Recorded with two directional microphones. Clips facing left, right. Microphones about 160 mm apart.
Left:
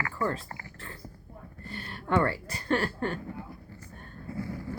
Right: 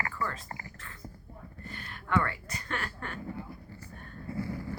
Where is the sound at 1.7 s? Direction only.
30° left (ahead or behind).